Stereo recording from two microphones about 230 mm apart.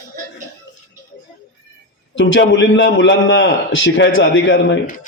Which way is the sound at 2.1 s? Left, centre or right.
Left.